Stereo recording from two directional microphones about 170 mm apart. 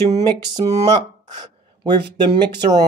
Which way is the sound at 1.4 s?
25° right (ahead or behind).